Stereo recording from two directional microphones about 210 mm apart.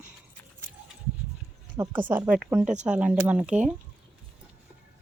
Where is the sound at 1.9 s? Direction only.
40° right (ahead or behind).